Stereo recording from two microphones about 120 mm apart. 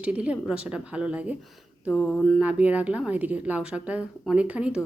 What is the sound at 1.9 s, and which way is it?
Mantra, 10° left (ahead or behind).